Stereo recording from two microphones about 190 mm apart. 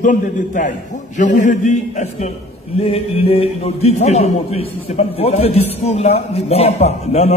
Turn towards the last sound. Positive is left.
turn(degrees=35)  # may be behind; listen again after turning